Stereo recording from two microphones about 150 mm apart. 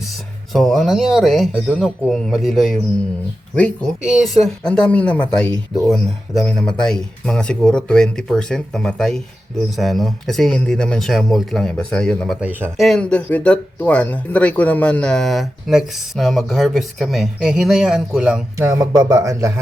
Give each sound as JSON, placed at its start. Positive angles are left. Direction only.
{"t": 0.5, "sound": "speech", "side_deg": 0}
{"t": 4.0, "sound": "speech", "side_deg": -5}
{"t": 12.4, "sound": "speech", "side_deg": -10}
{"t": 12.7, "sound": "speech", "side_deg": 0}
{"t": 18.5, "sound": "speech", "side_deg": -20}